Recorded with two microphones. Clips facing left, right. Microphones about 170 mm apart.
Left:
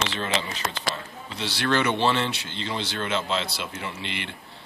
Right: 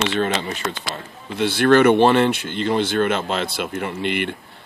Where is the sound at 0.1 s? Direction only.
55° right (ahead or behind).